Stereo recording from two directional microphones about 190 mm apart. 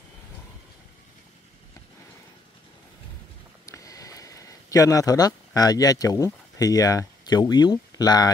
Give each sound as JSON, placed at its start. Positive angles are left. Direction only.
{"t": 3.6, "sound": "speech", "side_deg": 15}